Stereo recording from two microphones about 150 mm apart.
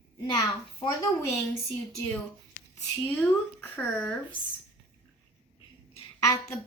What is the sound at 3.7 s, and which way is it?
Speech, 10° left (ahead or behind).